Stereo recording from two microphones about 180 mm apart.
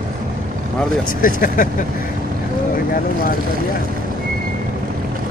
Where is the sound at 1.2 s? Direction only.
50° left (ahead or behind).